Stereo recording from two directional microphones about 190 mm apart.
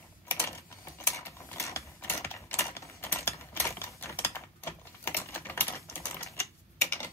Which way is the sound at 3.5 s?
10° left (ahead or behind).